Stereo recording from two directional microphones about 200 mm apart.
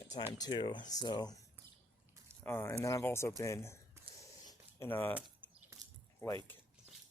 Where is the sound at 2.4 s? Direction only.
10° left (ahead or behind).